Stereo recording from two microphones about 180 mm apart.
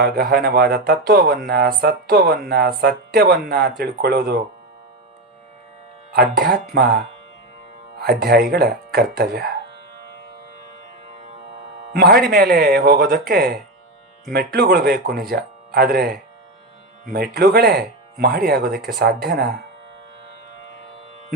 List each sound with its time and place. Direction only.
0.0 s speech: 60° right (ahead or behind)
6.1 s speech: 55° right (ahead or behind)
8.2 s speech: 55° right (ahead or behind)
11.9 s speech: 60° right (ahead or behind)
17.1 s speech: 60° right (ahead or behind)